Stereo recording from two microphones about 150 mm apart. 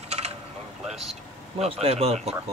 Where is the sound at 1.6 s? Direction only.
40° right (ahead or behind).